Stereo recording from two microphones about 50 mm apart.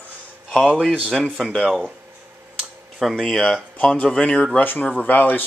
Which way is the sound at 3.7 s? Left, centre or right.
Left.